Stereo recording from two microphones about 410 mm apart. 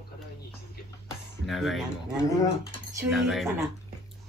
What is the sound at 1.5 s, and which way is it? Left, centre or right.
Speech, centre.